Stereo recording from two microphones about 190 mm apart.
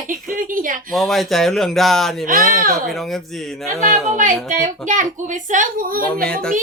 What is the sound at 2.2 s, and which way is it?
Speech, 45° right (ahead or behind).